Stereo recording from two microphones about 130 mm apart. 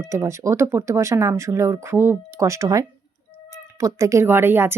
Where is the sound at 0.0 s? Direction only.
20° right (ahead or behind).